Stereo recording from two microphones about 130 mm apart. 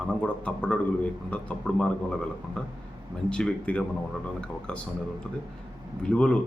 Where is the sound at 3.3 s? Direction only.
10° left (ahead or behind).